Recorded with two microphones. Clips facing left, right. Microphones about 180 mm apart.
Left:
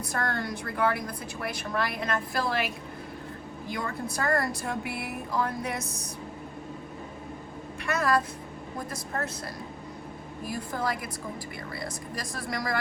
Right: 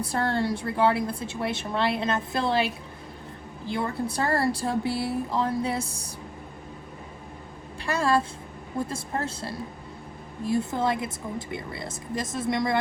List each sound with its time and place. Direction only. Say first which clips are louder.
0.0 s a woman's voice: right 5 dB; 30° right (ahead or behind)
7.9 s a woman's voice: right 2 dB; 30° right (ahead or behind)